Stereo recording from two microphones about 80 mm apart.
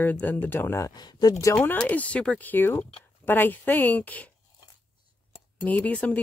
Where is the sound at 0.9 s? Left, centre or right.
Left.